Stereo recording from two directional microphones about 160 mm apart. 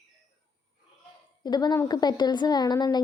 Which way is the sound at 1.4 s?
25° left (ahead or behind).